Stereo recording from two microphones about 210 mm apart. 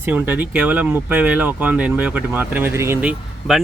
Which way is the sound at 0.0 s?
10° right (ahead or behind).